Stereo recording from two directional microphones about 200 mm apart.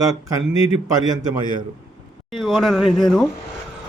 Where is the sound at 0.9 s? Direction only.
20° right (ahead or behind).